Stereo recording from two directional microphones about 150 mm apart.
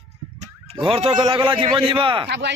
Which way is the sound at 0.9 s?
35° right (ahead or behind).